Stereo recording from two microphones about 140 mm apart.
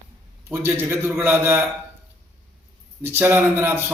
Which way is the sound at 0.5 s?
15° right (ahead or behind).